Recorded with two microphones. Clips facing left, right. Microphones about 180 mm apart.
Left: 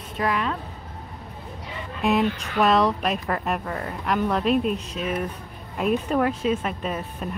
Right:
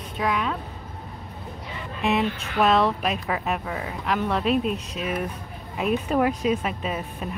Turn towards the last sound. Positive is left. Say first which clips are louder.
# even
turn(degrees=-5)  # may be behind; listen again after turning